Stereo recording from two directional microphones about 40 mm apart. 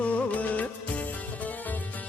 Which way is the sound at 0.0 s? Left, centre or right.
Left.